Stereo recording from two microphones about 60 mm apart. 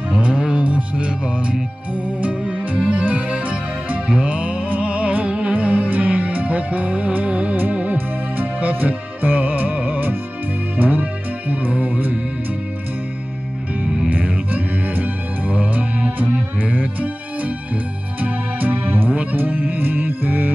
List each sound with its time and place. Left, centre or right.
0.1 s music: centre
13.7 s music: right